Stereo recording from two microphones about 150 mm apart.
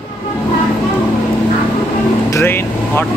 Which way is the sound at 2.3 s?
15° left (ahead or behind).